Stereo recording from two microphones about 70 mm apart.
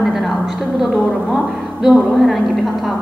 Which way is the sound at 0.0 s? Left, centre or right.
Centre.